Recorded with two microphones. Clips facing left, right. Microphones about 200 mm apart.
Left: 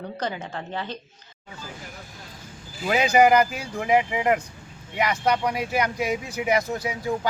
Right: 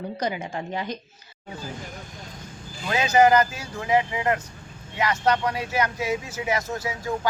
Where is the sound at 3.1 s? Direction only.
15° left (ahead or behind).